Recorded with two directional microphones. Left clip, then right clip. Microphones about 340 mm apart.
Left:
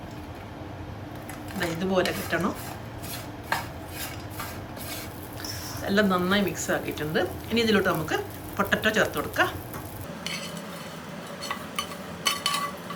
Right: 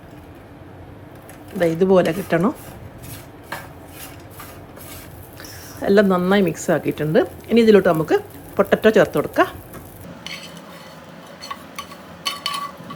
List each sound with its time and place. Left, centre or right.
1.5 s a woman's voice: centre
5.8 s a woman's voice: centre
12.2 s a sound: centre